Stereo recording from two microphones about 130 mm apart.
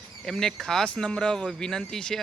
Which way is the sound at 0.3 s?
5° left (ahead or behind).